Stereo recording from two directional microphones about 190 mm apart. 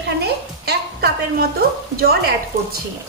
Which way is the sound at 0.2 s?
55° right (ahead or behind).